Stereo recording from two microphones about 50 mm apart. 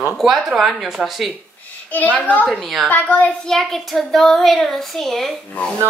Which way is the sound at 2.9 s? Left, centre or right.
Left.